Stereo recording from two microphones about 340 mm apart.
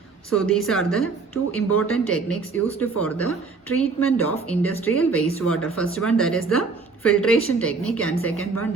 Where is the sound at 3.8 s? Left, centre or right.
Centre.